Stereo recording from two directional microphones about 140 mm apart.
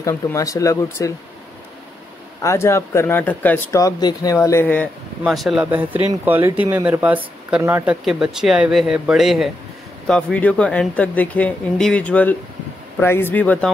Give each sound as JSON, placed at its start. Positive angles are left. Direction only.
{"t": 0.0, "sound": "speech", "side_deg": 20}
{"t": 2.4, "sound": "speech", "side_deg": 20}
{"t": 3.8, "sound": "speech", "side_deg": 25}
{"t": 5.2, "sound": "speech", "side_deg": 0}
{"t": 5.7, "sound": "speech", "side_deg": -10}